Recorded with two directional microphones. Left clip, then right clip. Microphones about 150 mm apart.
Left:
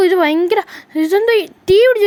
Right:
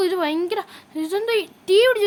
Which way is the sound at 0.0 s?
45° left (ahead or behind).